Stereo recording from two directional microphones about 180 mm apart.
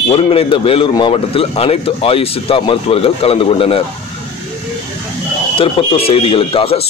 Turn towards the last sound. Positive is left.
turn(degrees=30)  # may be behind; listen again after turning